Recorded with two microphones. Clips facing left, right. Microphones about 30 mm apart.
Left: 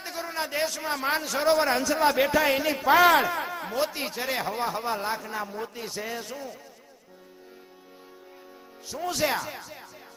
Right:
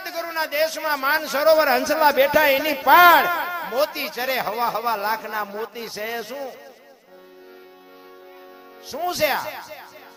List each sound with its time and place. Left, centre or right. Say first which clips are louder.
0.0 s a man's voice: right 6 dB; right
8.9 s speech: right 5 dB; right